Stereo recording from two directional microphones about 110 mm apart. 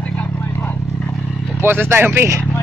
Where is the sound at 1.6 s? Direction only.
20° right (ahead or behind).